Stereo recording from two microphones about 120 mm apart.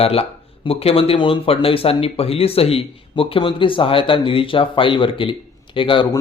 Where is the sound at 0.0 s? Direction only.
55° left (ahead or behind).